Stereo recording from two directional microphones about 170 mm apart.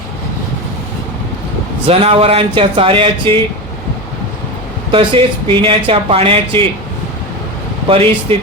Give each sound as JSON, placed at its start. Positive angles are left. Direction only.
{"t": 1.9, "sound": "speech", "side_deg": -35}
{"t": 4.9, "sound": "speech", "side_deg": -30}
{"t": 7.9, "sound": "speech", "side_deg": -35}